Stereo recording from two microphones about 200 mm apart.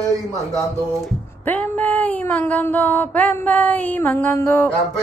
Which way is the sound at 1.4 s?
5° left (ahead or behind).